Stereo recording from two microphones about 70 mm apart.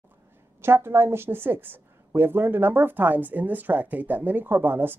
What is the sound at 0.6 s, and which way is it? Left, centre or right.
Speech, right.